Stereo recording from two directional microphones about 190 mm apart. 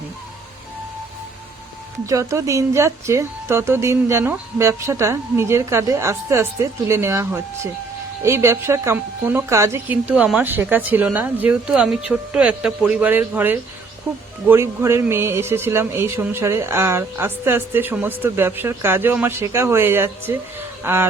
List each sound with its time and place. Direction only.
2.0 s speech: 15° right (ahead or behind)